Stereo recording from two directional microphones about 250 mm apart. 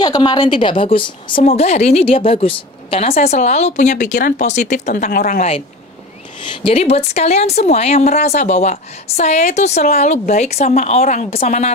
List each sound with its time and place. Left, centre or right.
0.0 s a woman's voice: centre